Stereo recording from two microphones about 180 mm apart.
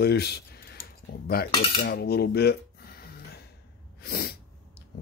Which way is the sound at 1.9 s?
60° left (ahead or behind).